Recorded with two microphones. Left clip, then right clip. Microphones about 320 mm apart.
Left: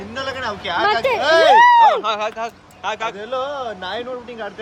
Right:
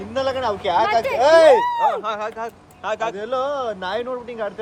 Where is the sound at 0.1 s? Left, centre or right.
Centre.